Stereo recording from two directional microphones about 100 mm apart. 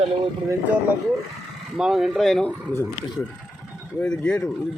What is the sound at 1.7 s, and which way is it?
Speech, centre (ahead or behind).